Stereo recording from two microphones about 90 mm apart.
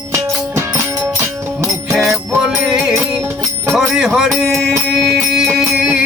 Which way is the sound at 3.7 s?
5° right (ahead or behind).